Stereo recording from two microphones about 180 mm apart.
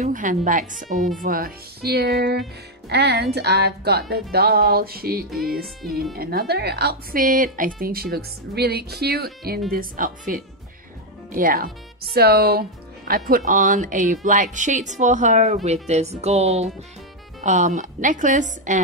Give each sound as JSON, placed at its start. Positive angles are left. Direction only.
{"t": 0.0, "sound": "a woman's voice", "side_deg": -45}
{"t": 5.8, "sound": "speech", "side_deg": 0}
{"t": 6.1, "sound": "a woman's voice", "side_deg": -60}